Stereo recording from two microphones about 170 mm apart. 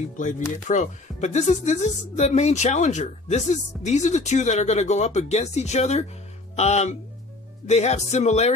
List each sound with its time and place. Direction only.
0.7 s a woman's voice: 45° left (ahead or behind)